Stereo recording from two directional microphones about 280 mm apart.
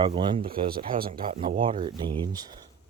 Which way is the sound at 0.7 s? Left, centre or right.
Right.